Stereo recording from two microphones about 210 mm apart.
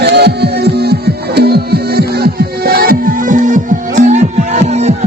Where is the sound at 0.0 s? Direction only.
50° right (ahead or behind).